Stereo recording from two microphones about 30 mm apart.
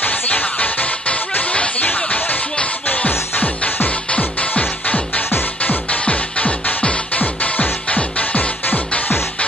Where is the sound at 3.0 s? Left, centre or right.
Left.